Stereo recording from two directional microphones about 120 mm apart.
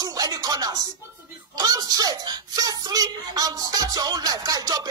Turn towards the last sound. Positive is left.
turn(degrees=-30)  # may be behind; listen again after turning